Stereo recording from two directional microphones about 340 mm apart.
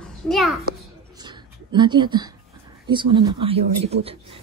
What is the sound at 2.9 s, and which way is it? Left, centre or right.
Speech, centre.